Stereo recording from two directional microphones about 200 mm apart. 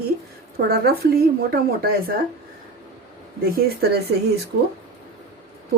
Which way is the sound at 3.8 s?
55° right (ahead or behind).